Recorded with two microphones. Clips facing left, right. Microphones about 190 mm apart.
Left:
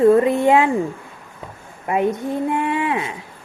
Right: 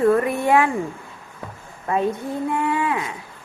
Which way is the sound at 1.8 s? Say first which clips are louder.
Left 3 dB; 15° left (ahead or behind).